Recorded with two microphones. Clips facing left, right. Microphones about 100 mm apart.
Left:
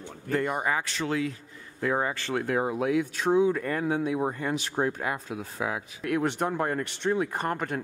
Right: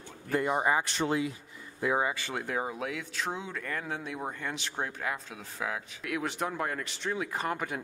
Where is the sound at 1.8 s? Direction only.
10° right (ahead or behind); by 4.0 s 10° left (ahead or behind).